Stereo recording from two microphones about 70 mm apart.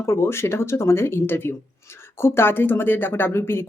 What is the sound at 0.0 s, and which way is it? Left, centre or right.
Speech, left.